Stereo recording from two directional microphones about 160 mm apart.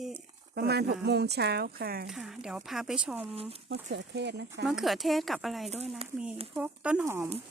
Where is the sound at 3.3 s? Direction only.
40° right (ahead or behind).